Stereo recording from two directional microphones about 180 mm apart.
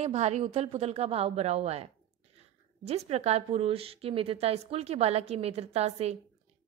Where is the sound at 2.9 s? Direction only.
35° right (ahead or behind).